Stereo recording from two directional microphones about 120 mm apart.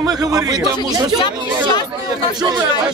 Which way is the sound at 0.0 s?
30° right (ahead or behind).